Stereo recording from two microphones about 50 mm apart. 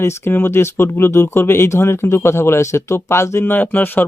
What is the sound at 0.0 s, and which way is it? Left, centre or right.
Speech, left.